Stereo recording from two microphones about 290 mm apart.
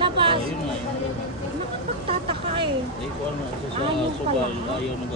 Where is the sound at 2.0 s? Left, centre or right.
Centre.